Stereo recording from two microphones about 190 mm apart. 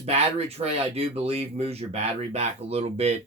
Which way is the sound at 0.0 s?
35° right (ahead or behind).